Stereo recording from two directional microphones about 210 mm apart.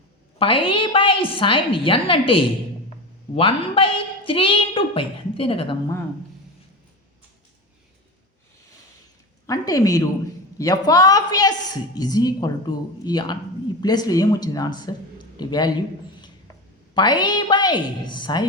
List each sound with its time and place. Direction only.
0.3 s a man's voice: 25° left (ahead or behind)
9.5 s a woman's voice: 15° left (ahead or behind)
16.9 s a man's voice: 20° left (ahead or behind)